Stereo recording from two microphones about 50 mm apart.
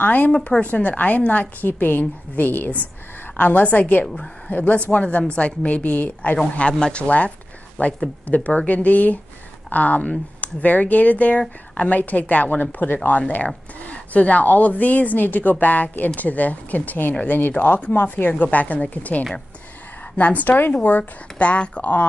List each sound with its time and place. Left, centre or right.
0.0 s a woman's voice: left
4.0 s speech: centre
4.5 s a woman's voice: left
21.4 s speech: left